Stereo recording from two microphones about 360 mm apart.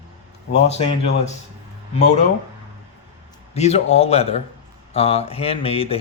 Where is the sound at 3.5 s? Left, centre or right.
Centre.